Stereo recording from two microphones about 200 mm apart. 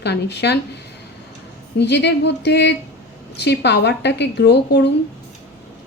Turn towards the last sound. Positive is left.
turn(degrees=60)  # may be behind; listen again after turning